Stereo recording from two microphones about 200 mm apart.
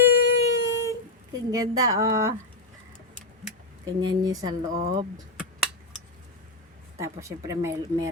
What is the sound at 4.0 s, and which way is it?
Speech, 20° right (ahead or behind).